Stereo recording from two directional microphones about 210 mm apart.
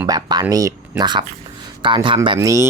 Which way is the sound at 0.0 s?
20° right (ahead or behind).